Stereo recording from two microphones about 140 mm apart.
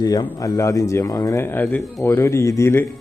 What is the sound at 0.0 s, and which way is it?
Speech, 25° left (ahead or behind).